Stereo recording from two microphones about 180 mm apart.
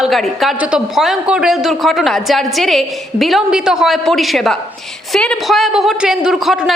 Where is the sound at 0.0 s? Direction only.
Centre (ahead or behind).